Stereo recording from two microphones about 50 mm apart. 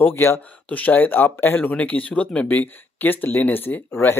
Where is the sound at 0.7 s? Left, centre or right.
Left.